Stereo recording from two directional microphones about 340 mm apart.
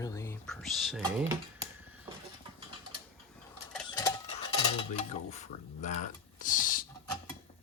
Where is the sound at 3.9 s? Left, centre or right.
Centre.